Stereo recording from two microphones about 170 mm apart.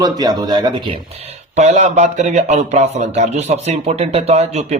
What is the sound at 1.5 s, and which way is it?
A man's voice, 45° right (ahead or behind).